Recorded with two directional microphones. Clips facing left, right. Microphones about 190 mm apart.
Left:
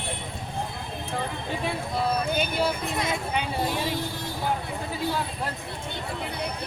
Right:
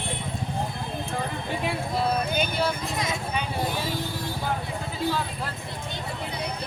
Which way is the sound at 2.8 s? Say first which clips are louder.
Left 1 dB; 55° left (ahead or behind).